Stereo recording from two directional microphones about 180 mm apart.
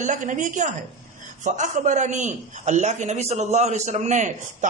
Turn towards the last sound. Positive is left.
turn(degrees=-40)  # may be behind; listen again after turning